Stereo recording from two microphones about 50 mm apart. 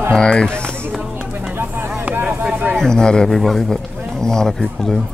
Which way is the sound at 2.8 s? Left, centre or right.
Centre.